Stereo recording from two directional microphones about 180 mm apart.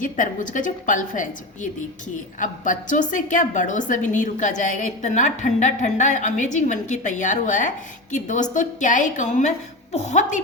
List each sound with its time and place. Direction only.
0.0 s a woman's voice: 45° left (ahead or behind)
2.4 s a woman's voice: 45° left (ahead or behind)